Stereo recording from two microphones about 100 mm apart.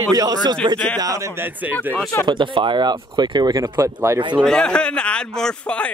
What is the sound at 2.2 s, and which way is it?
Speech, 55° right (ahead or behind).